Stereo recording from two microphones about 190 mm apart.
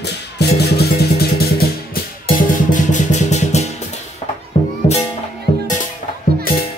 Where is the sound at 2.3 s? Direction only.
40° left (ahead or behind).